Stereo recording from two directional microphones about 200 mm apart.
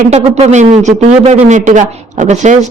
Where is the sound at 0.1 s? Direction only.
35° right (ahead or behind).